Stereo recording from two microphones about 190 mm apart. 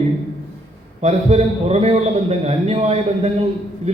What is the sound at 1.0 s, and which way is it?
A man's voice, 35° right (ahead or behind).